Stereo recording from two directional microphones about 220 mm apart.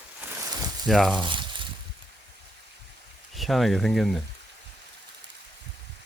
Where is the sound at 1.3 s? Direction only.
20° right (ahead or behind).